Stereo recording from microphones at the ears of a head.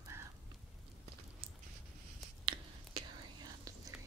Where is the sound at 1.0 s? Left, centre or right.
Right.